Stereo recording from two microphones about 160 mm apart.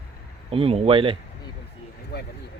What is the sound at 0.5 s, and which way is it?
Speech, 35° right (ahead or behind).